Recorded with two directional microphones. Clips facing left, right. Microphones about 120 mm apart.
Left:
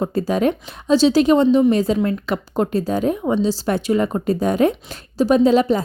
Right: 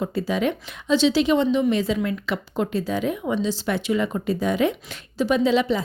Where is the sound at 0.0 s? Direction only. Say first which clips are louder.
Left 5 dB; 45° left (ahead or behind).